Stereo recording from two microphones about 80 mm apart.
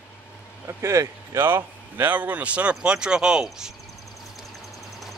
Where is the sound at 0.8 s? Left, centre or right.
Right.